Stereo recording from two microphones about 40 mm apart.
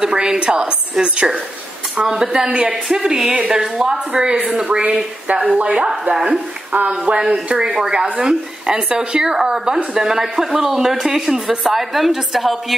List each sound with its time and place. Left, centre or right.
0.1 s speech: right
2.4 s speech: right
2.7 s speech: centre
4.6 s speech: right
6.9 s speech: right; by 12.7 s centre